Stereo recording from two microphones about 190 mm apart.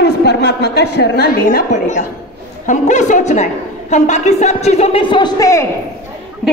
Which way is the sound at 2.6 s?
40° left (ahead or behind).